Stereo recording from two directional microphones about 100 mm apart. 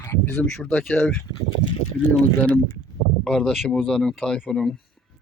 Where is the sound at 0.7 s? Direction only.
15° left (ahead or behind).